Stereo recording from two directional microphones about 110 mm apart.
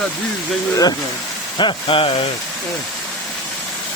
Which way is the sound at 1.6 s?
50° left (ahead or behind).